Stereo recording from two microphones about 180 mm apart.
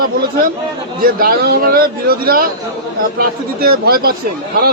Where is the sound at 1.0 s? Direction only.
55° right (ahead or behind).